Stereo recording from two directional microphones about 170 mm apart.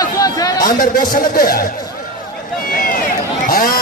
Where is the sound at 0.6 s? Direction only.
55° left (ahead or behind).